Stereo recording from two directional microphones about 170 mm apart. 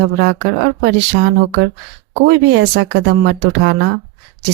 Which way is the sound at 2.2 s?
90° right.